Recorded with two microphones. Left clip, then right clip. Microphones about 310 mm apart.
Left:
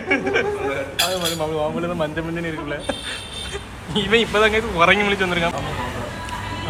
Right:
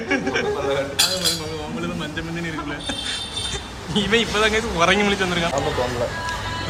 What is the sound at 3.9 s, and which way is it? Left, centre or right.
Speech, centre.